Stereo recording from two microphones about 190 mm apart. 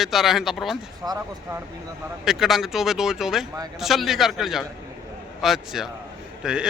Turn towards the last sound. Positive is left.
turn(degrees=-5)  # may be behind; listen again after turning